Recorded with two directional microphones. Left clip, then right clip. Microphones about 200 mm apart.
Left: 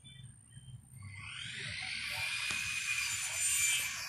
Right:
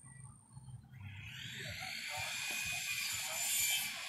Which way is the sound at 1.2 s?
40° right (ahead or behind).